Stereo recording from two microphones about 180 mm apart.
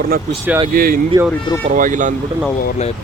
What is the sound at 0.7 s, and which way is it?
Speech, 55° right (ahead or behind).